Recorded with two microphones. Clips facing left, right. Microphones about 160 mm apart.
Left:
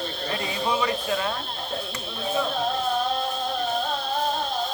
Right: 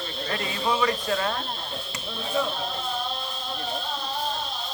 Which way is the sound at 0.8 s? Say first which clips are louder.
Even; 15° left (ahead or behind).